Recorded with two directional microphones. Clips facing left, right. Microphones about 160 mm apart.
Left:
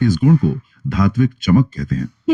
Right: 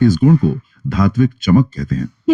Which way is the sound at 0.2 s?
35° right (ahead or behind).